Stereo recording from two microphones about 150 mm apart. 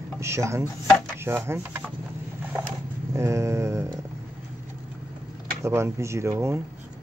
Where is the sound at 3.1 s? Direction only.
20° right (ahead or behind).